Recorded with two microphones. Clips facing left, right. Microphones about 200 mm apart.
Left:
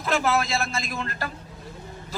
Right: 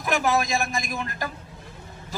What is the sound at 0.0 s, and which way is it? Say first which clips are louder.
A man's voice: even; 15° right (ahead or behind).